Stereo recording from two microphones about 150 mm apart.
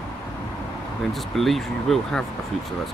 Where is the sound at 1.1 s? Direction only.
Centre (ahead or behind).